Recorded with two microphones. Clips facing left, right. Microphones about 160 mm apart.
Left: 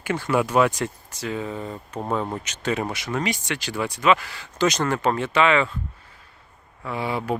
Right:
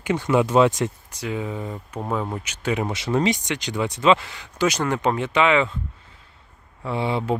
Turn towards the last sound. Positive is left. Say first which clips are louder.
# right 2 dB
turn(degrees=-25)  # may be behind; listen again after turning